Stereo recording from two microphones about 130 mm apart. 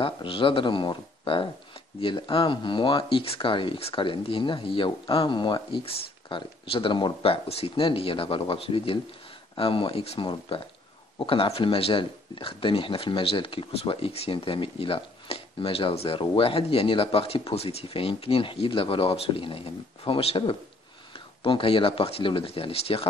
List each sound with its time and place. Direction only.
0.0 s speech: 45° left (ahead or behind)